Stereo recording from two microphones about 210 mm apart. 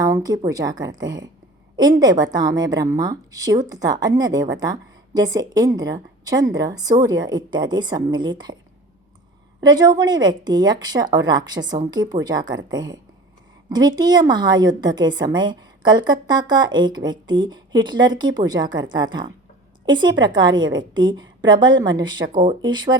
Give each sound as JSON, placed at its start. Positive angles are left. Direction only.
{"t": 0.0, "sound": "a woman's voice", "side_deg": -15}
{"t": 9.6, "sound": "a woman's voice", "side_deg": -20}